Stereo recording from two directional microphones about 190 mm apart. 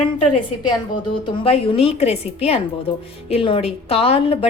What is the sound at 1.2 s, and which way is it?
A woman's voice, 30° left (ahead or behind).